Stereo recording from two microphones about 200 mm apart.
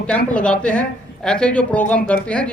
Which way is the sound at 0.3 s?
5° left (ahead or behind).